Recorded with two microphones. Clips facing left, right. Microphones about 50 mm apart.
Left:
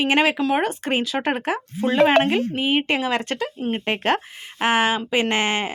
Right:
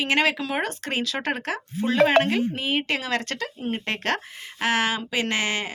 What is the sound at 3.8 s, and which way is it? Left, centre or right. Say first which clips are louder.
A woman's voice: left 6 dB; centre.